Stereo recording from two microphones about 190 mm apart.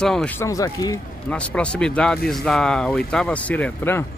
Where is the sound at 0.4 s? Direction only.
15° left (ahead or behind).